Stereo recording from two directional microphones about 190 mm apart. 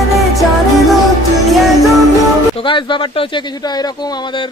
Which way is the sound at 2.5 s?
25° left (ahead or behind).